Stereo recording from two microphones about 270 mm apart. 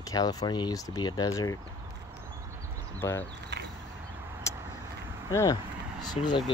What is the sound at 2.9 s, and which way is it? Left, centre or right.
Speech, centre.